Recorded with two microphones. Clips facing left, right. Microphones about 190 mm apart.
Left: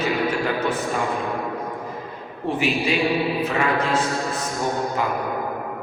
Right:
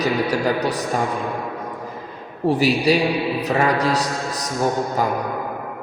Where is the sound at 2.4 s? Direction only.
40° right (ahead or behind).